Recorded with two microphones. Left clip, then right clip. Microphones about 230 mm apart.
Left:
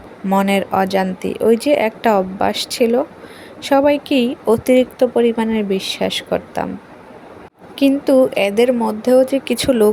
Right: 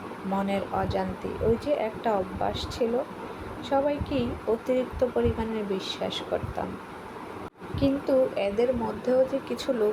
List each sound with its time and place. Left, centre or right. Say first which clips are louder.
0.3 s speech: left 13 dB; left
7.8 s speech: left 11 dB; left